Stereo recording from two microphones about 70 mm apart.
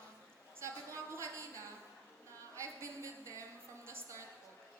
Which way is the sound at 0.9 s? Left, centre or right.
Right.